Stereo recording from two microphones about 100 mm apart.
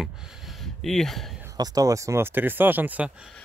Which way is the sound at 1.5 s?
40° right (ahead or behind).